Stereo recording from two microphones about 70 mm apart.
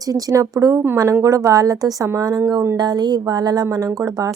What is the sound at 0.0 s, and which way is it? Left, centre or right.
A woman's voice, right.